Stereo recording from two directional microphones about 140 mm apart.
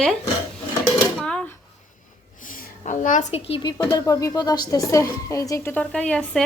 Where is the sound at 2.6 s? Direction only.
65° left (ahead or behind).